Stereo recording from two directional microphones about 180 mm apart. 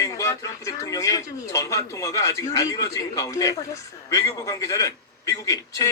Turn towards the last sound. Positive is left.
turn(degrees=20)  # may be behind; listen again after turning